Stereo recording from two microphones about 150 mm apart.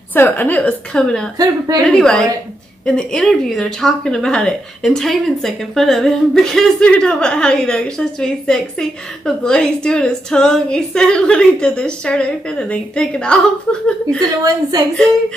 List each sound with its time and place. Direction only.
0.1 s a woman's voice: 10° left (ahead or behind)
1.4 s a woman's voice: 25° right (ahead or behind)
1.9 s speech: 5° left (ahead or behind)
14.4 s a woman's voice: 25° right (ahead or behind)